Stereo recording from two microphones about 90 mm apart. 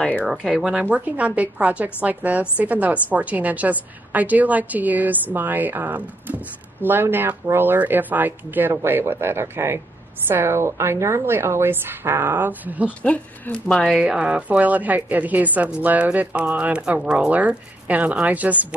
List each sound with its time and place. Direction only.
0.2 s a woman's voice: 5° right (ahead or behind)
13.0 s speech: 15° left (ahead or behind)
13.9 s a woman's voice: 10° right (ahead or behind)